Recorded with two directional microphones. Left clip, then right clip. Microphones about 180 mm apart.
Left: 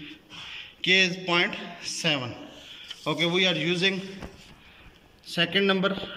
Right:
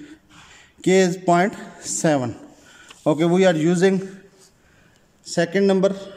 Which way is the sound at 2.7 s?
90° right.